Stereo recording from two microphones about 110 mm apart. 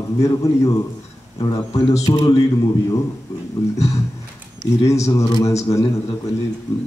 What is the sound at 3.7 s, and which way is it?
Speech, 30° left (ahead or behind).